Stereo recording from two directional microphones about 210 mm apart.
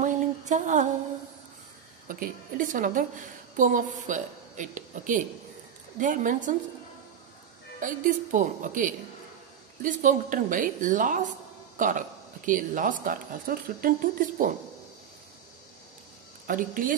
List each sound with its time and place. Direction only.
0.0 s a sound: 35° right (ahead or behind)
2.0 s speech: 40° right (ahead or behind)
7.8 s speech: 40° right (ahead or behind)
16.4 s speech: 40° right (ahead or behind)